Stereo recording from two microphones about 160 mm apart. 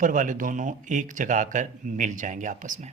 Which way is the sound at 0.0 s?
55° right (ahead or behind).